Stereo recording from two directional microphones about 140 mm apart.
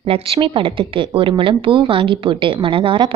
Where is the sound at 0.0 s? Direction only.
45° right (ahead or behind).